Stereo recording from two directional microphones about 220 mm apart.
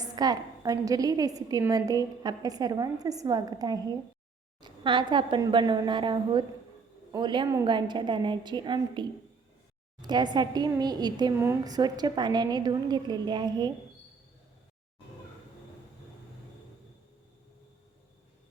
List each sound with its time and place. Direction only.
0.0 s a woman's voice: 15° right (ahead or behind)